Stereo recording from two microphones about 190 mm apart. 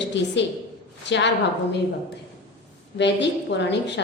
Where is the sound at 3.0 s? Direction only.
65° left (ahead or behind).